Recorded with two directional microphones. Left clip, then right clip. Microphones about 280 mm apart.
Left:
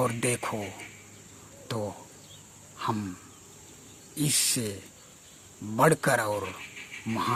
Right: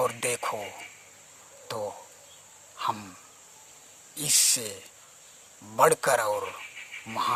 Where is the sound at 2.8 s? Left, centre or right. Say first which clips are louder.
Right 1 dB; centre.